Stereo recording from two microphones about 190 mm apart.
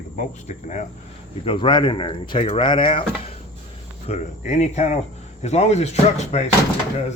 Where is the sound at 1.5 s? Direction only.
25° left (ahead or behind).